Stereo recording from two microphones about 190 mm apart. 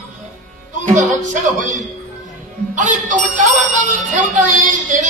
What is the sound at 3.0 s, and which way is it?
Music, 45° right (ahead or behind).